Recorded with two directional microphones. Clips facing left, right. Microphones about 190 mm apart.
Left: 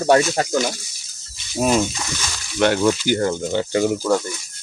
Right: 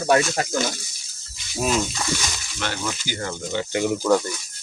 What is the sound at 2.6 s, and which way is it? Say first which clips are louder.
Speech: left 12 dB; 55° left (ahead or behind).